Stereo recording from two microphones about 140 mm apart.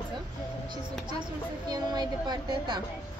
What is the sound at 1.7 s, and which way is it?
Speech, 30° right (ahead or behind).